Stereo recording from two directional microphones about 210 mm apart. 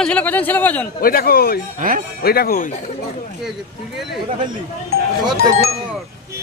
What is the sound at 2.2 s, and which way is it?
Speech, 45° left (ahead or behind).